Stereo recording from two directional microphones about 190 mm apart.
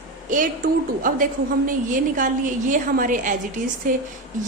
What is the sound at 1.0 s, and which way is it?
A woman's voice, 45° right (ahead or behind).